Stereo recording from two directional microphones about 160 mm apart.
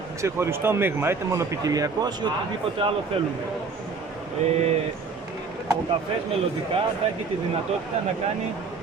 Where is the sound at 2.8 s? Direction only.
35° right (ahead or behind).